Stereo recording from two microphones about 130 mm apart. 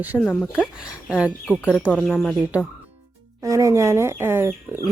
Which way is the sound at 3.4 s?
25° right (ahead or behind).